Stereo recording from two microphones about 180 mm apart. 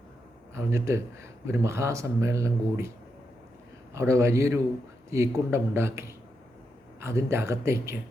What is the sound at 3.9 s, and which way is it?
A man's voice, 15° right (ahead or behind).